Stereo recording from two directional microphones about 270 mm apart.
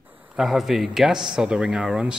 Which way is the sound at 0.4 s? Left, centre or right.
Centre.